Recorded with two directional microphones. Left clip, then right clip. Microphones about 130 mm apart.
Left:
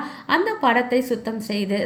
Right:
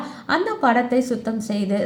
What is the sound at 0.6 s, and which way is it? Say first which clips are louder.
Speech: right 1 dB; 35° right (ahead or behind).